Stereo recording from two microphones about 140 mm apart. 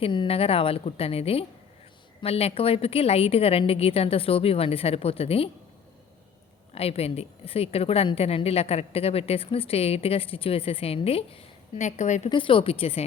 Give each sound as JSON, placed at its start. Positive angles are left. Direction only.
{"t": 0.0, "sound": "a woman's voice", "side_deg": 40}
{"t": 6.7, "sound": "a woman's voice", "side_deg": 45}
{"t": 11.9, "sound": "a woman's voice", "side_deg": 55}
{"t": 12.3, "sound": "speech", "side_deg": 40}